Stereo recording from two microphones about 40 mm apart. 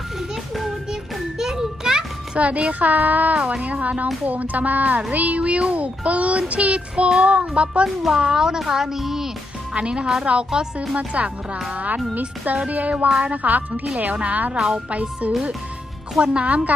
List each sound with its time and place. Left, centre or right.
1.4 s children playing: centre
2.3 s speech: right
3.3 s child singing: right
3.6 s speech: right
7.2 s child singing: right
7.9 s a child's voice: centre
9.7 s child singing: right
10.3 s speech: right
12.7 s speech: right
14.5 s a child's voice: centre
14.8 s speech: right
16.2 s child singing: right